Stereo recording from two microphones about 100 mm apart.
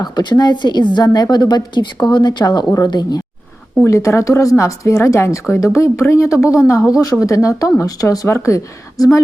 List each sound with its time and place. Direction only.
0.0 s a woman's voice: 45° left (ahead or behind)
3.8 s speech: 30° left (ahead or behind)